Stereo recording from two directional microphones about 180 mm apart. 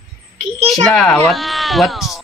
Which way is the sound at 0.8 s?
5° left (ahead or behind).